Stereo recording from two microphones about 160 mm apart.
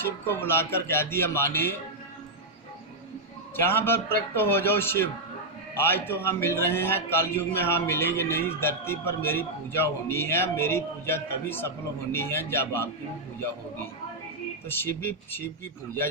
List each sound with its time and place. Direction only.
0.3 s a man's voice: 15° left (ahead or behind)
3.6 s a man's voice: 15° left (ahead or behind)
14.7 s a man's voice: 15° left (ahead or behind)